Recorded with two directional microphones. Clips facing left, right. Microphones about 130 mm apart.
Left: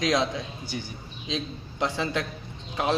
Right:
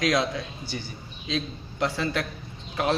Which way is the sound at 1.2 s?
20° left (ahead or behind).